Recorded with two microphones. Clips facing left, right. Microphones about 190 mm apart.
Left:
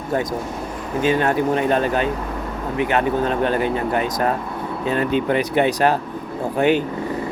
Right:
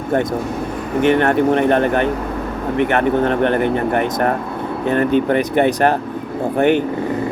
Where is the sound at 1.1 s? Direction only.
65° right (ahead or behind).